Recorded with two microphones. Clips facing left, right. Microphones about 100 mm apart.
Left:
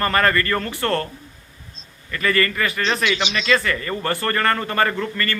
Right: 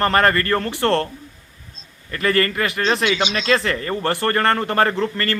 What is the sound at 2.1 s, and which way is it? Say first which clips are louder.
Speech: right 1 dB; 40° right (ahead or behind).